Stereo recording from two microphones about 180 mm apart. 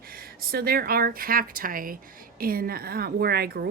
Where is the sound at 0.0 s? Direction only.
55° right (ahead or behind).